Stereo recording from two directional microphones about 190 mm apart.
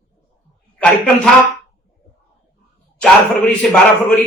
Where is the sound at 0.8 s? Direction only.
5° left (ahead or behind).